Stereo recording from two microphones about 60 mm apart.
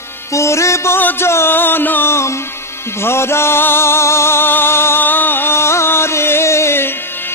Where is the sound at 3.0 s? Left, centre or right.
Left.